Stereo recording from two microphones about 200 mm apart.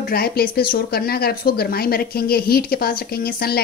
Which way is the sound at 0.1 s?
50° left (ahead or behind).